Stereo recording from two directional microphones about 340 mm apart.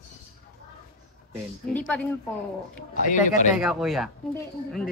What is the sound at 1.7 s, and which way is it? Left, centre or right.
Speech, centre.